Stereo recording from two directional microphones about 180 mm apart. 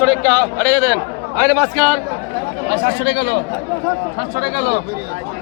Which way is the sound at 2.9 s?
85° left.